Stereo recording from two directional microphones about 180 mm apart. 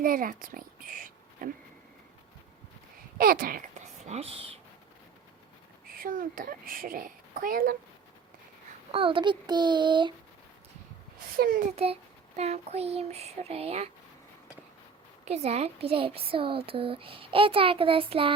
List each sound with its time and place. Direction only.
0.0 s speech: 50° right (ahead or behind)
3.2 s speech: 55° right (ahead or behind); by 4.4 s 35° right (ahead or behind)
6.0 s a child's voice: 50° right (ahead or behind)
8.9 s a child's voice: 30° right (ahead or behind)
11.3 s a child's voice: 50° right (ahead or behind)
12.4 s speech: 35° right (ahead or behind)
15.2 s speech: 35° right (ahead or behind)